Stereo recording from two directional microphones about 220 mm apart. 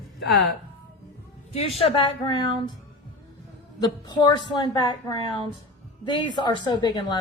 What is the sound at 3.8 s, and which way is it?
A woman's voice, 20° left (ahead or behind).